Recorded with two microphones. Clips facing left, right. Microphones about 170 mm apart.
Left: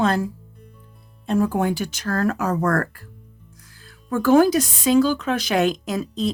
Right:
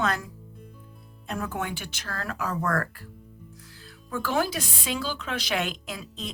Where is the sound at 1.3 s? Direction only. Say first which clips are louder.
Left 11 dB; 30° left (ahead or behind).